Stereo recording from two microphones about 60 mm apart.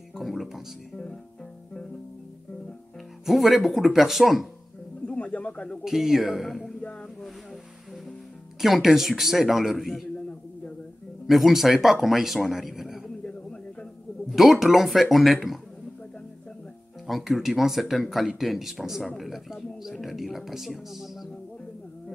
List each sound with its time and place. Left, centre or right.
0.1 s music: centre
3.3 s speech: centre
5.0 s bird: left
5.9 s speech: centre
6.8 s a sound: left
8.5 s speech: centre
11.2 s speech: centre
13.2 s a sound: centre
14.3 s speech: centre
17.1 s speech: centre